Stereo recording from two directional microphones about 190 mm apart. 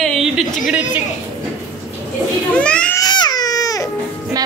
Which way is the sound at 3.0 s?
20° left (ahead or behind).